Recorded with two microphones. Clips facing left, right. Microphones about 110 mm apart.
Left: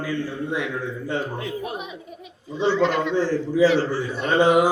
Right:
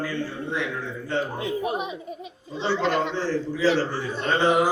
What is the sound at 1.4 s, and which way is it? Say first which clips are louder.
Speech: right 3 dB; 25° right (ahead or behind).